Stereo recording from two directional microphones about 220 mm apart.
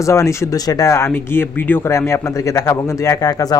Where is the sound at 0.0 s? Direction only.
15° left (ahead or behind).